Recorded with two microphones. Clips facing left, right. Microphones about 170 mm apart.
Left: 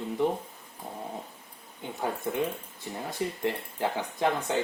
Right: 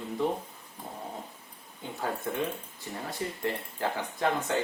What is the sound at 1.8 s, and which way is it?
Speech, 20° left (ahead or behind).